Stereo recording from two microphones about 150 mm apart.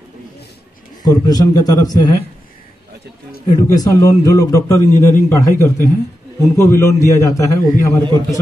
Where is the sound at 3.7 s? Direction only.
25° left (ahead or behind).